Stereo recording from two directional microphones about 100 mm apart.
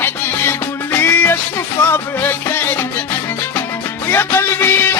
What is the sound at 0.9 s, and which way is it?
Music, 20° left (ahead or behind).